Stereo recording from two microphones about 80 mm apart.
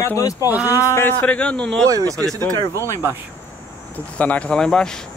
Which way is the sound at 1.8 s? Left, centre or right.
Right.